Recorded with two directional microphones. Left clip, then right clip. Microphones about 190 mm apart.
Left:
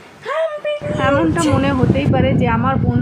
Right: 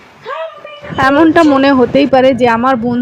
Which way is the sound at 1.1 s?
35° right (ahead or behind).